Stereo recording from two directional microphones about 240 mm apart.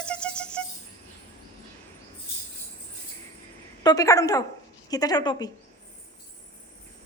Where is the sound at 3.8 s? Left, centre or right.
Centre.